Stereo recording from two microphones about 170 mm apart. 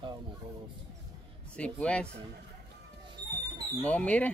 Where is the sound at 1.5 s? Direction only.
5° left (ahead or behind).